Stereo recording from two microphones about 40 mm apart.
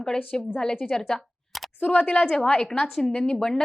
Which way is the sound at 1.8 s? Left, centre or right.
Left.